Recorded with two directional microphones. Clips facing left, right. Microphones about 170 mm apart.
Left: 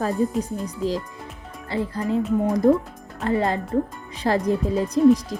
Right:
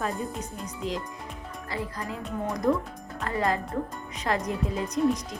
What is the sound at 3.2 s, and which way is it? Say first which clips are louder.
Speech: left 5 dB; 30° left (ahead or behind).